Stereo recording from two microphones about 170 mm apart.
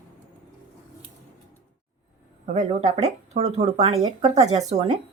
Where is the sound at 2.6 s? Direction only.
40° right (ahead or behind).